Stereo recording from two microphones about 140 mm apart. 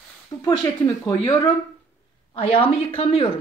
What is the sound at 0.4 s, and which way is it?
Speech, 25° left (ahead or behind).